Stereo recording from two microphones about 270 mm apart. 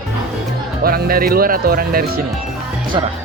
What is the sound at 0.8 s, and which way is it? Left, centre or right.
Speech, right.